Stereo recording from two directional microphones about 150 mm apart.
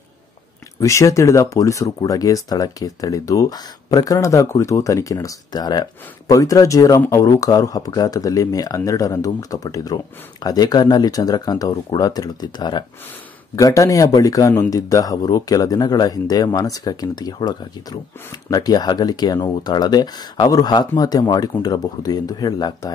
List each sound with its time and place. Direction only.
0.7 s speech: 20° left (ahead or behind)